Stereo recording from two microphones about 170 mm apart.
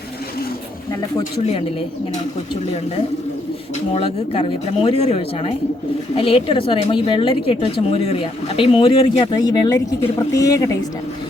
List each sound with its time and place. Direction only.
3.9 s a woman's voice: 35° left (ahead or behind)